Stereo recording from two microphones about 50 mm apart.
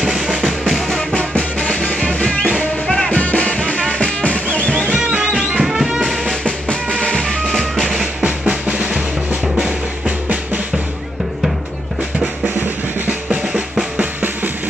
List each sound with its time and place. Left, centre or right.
0.0 s music: centre
1.1 s music: left
4.8 s music: right
5.6 s music: centre
6.4 s music: centre
7.2 s music: centre
8.2 s drum: right
10.0 s music: right
12.5 s drum: right